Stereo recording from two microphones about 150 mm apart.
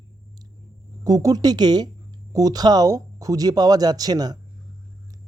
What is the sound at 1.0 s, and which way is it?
Speech, 25° right (ahead or behind).